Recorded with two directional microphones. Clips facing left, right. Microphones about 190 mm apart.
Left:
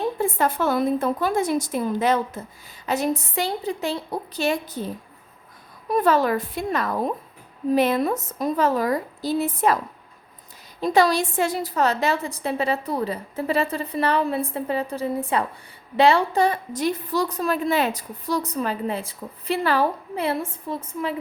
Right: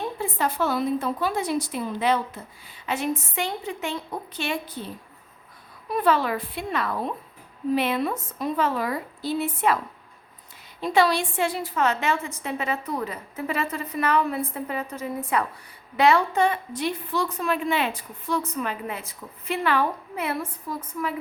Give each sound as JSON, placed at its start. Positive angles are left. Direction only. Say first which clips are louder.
{"t": 0.2, "sound": "a woman's voice", "louder": "left 3 dB", "side_deg": 50}
{"t": 5.9, "sound": "a woman's voice", "louder": "left 3 dB", "side_deg": 45}